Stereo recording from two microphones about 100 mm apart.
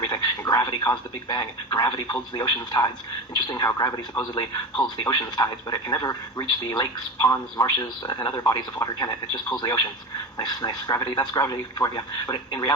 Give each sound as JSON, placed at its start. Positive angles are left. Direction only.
{"t": 0.0, "sound": "speech", "side_deg": 45}